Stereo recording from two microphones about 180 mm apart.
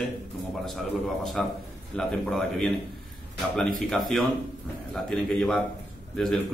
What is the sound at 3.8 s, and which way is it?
Speech, centre (ahead or behind).